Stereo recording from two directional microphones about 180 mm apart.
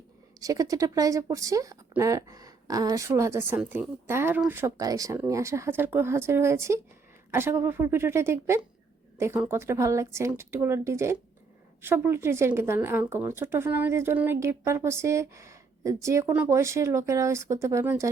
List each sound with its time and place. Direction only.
0.3 s speech: 20° right (ahead or behind)